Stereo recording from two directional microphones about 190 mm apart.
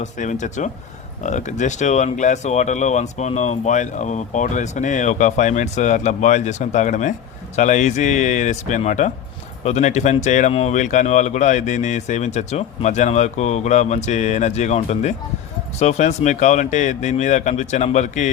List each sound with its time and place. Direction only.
0.0 s speech: 40° left (ahead or behind)